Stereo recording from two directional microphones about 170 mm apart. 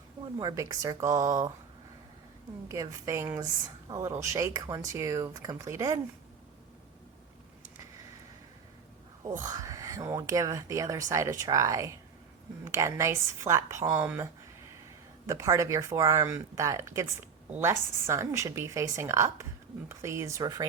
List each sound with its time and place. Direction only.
0.3 s speech: 20° right (ahead or behind)
2.6 s a woman's voice: 20° right (ahead or behind)
9.5 s a woman's voice: 20° right (ahead or behind)
15.3 s a woman's voice: 20° right (ahead or behind)